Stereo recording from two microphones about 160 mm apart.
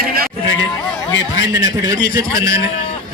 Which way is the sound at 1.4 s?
20° right (ahead or behind).